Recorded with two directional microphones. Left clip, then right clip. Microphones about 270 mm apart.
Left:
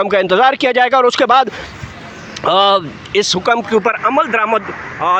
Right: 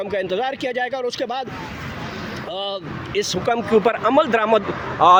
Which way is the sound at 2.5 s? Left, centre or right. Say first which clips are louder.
Left 18 dB; left.